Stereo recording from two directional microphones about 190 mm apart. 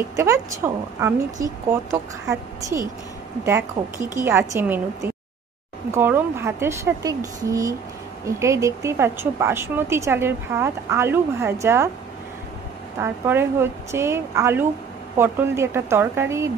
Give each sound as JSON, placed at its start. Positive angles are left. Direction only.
{"t": 0.1, "sound": "a woman's voice", "side_deg": -15}
{"t": 3.8, "sound": "speech", "side_deg": -40}
{"t": 4.1, "sound": "a woman's voice", "side_deg": -15}
{"t": 13.0, "sound": "a woman's voice", "side_deg": -10}